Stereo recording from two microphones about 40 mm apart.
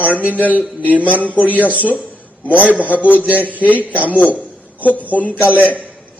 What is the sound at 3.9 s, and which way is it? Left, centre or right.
Speech, left.